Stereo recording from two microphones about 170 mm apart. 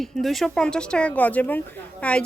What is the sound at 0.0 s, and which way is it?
A woman's voice, centre (ahead or behind).